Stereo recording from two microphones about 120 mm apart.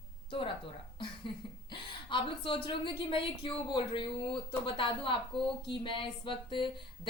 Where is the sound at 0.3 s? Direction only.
45° left (ahead or behind).